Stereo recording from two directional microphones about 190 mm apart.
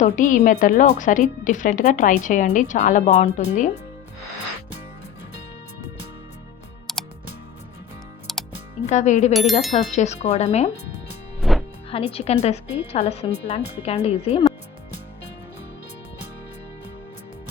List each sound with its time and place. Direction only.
0.0 s a woman's voice: 40° left (ahead or behind)
6.9 s music: centre (ahead or behind)
8.3 s music: centre (ahead or behind)
8.8 s a woman's voice: 40° left (ahead or behind)
9.3 s speech: centre (ahead or behind)
9.7 s a woman's voice: 35° left (ahead or behind)
11.3 s music: centre (ahead or behind)
11.9 s a woman's voice: 30° left (ahead or behind)